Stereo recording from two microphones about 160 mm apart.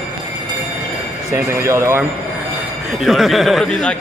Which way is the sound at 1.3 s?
15° right (ahead or behind).